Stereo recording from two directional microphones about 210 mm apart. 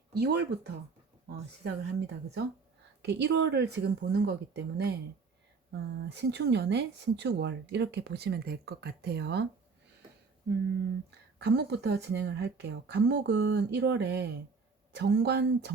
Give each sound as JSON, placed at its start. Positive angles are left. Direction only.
{"t": 0.1, "sound": "speech", "side_deg": -50}
{"t": 11.3, "sound": "speech", "side_deg": -55}